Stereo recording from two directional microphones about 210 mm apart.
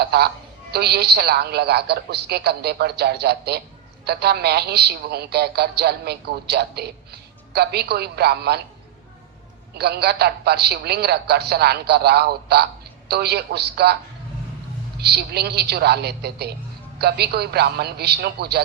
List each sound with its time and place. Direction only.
0.0 s speech: 50° right (ahead or behind)
9.7 s speech: 50° right (ahead or behind)
14.9 s speech: 50° right (ahead or behind)